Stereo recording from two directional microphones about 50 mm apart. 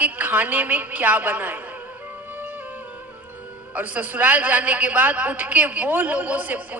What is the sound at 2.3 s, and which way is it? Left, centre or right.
Music, right.